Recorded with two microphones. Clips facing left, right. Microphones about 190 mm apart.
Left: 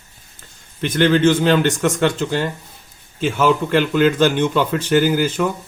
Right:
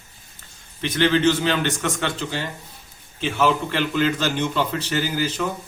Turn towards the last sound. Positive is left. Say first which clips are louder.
# left 7 dB
turn(degrees=50)  # may be behind; listen again after turning